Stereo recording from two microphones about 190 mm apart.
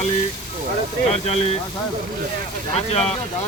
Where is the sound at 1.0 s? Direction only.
35° left (ahead or behind).